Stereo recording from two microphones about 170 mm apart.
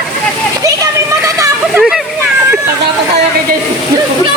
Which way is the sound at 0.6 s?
20° right (ahead or behind).